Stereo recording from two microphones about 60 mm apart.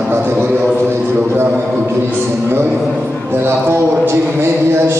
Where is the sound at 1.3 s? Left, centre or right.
Right.